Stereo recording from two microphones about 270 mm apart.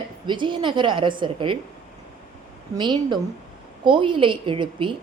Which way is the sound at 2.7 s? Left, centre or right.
Centre.